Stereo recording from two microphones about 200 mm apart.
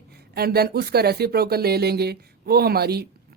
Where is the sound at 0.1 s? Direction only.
50° right (ahead or behind).